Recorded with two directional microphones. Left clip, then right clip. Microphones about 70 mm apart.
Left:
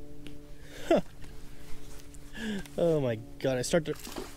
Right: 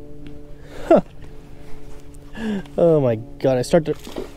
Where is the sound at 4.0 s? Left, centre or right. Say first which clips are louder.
Right 9 dB; left.